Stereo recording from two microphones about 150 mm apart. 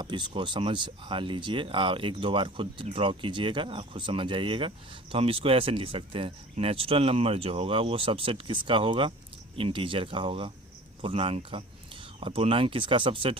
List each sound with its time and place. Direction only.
0.0 s speech: 30° right (ahead or behind)